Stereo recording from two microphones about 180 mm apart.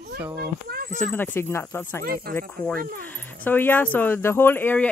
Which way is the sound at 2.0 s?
55° right (ahead or behind).